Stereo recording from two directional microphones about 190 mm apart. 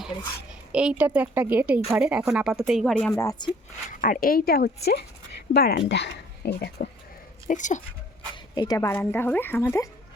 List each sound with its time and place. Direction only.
0.7 s a woman's voice: 5° right (ahead or behind)
3.1 s a woman's voice: 15° left (ahead or behind)
4.0 s speech: 45° left (ahead or behind)
7.4 s speech: 40° left (ahead or behind)
8.5 s a woman's voice: 20° left (ahead or behind)